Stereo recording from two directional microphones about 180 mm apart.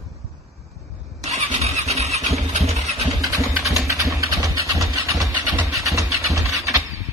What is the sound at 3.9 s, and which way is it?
Vehicle, 20° right (ahead or behind).